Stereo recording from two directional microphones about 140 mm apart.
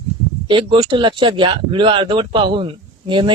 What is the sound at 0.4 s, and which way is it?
Speech, 35° right (ahead or behind).